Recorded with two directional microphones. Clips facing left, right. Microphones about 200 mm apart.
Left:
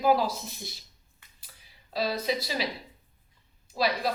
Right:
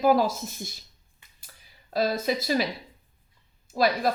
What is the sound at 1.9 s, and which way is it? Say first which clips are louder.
Speech: right 3 dB; 50° right (ahead or behind).